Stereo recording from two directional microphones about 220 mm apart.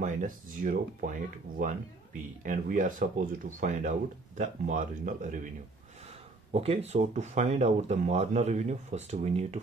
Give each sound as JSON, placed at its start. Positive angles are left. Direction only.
{"t": 0.0, "sound": "speech", "side_deg": -35}
{"t": 2.4, "sound": "speech", "side_deg": -35}
{"t": 6.5, "sound": "speech", "side_deg": -25}